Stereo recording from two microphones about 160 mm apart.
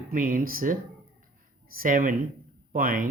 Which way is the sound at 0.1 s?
60° right (ahead or behind).